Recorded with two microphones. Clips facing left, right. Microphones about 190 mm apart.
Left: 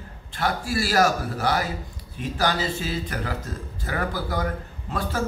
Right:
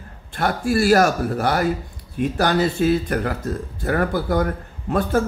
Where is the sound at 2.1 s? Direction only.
55° right (ahead or behind).